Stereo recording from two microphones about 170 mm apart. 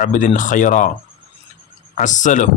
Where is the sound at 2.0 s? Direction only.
45° left (ahead or behind).